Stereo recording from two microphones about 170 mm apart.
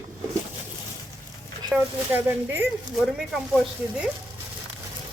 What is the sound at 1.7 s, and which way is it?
Speech, 10° right (ahead or behind).